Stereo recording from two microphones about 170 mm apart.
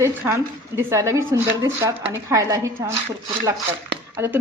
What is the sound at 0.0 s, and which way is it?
A woman's voice, 15° right (ahead or behind).